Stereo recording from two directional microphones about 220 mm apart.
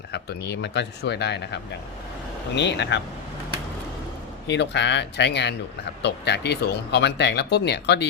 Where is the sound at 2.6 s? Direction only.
50° left (ahead or behind).